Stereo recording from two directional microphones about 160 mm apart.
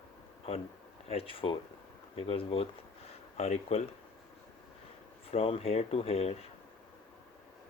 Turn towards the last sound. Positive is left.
turn(degrees=40)  # may be behind; listen again after turning